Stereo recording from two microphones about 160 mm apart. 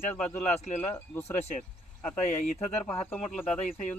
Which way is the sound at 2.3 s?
45° left (ahead or behind).